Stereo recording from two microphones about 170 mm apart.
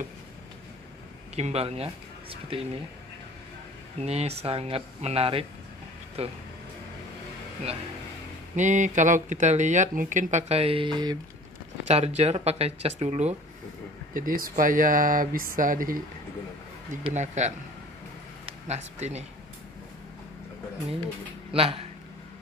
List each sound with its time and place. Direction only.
1.3 s speech: 40° right (ahead or behind)
4.0 s speech: 40° right (ahead or behind)
8.5 s speech: 45° right (ahead or behind); by 11.1 s 25° right (ahead or behind)
12.2 s speech: 40° right (ahead or behind)
14.1 s speech: 55° right (ahead or behind)
17.0 s speech: 45° right (ahead or behind)
21.5 s speech: 35° right (ahead or behind)